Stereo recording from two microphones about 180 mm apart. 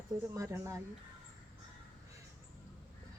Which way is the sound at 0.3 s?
15° right (ahead or behind).